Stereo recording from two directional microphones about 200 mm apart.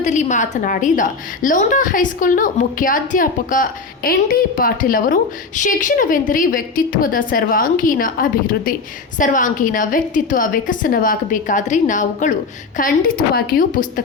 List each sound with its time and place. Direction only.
0.0 s a woman's voice: 35° left (ahead or behind)